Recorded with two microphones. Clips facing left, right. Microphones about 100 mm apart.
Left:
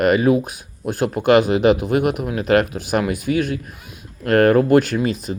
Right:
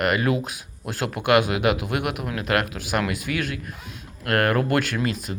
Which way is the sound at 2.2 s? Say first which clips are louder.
Left 6 dB; 25° left (ahead or behind).